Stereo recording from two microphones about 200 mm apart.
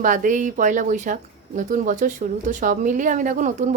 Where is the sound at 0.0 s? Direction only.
40° right (ahead or behind).